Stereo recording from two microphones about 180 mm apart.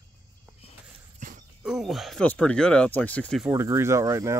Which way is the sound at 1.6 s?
Centre (ahead or behind).